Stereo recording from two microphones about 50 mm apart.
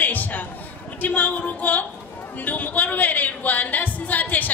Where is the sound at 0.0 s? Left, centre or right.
Left.